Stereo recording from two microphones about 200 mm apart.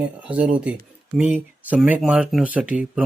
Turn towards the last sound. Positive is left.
turn(degrees=-5)  # may be behind; listen again after turning